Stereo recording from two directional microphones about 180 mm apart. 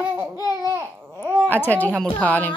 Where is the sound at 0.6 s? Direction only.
15° right (ahead or behind).